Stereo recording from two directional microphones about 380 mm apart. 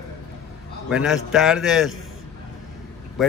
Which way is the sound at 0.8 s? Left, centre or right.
Centre.